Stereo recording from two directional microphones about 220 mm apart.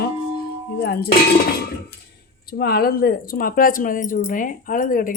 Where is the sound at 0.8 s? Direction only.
45° left (ahead or behind).